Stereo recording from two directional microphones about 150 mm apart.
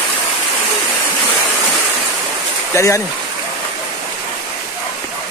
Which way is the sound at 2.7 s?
20° left (ahead or behind).